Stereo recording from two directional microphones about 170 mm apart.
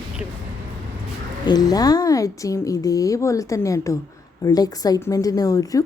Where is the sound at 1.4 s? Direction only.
25° left (ahead or behind).